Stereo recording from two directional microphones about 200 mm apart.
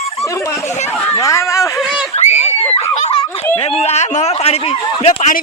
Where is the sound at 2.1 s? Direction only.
35° left (ahead or behind).